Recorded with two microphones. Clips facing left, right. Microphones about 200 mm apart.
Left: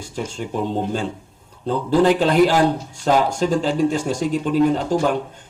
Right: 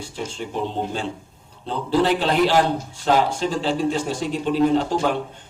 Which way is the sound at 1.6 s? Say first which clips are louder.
Left 4 dB; 45° left (ahead or behind).